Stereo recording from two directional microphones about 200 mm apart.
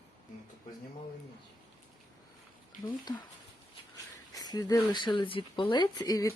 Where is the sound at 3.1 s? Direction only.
20° left (ahead or behind).